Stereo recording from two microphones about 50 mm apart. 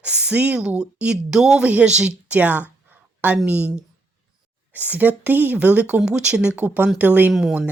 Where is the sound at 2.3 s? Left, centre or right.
Right.